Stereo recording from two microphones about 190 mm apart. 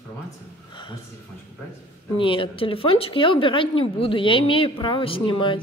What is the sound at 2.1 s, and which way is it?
A woman's voice, 25° left (ahead or behind).